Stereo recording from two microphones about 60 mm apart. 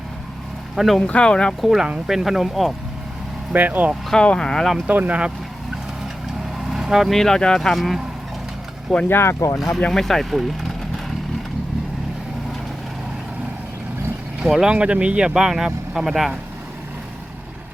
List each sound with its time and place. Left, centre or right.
0.8 s speech: centre
1.0 s speech: centre
1.6 s speech: centre
3.5 s speech: right
4.1 s speech: centre
4.9 s speech: right
6.7 s vehicle: centre
7.1 s speech: centre
7.8 s speech: centre
9.0 s speech: left
9.9 s speech: centre
14.4 s speech: centre